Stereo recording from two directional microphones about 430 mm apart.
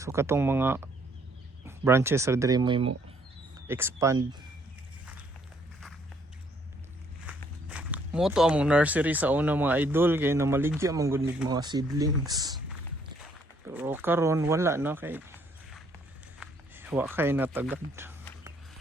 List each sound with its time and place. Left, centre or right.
0.0 s speech: centre
7.3 s speech: centre
13.7 s speech: centre
16.4 s a sound: centre